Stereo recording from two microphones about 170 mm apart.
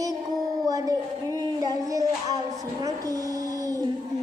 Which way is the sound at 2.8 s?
20° right (ahead or behind).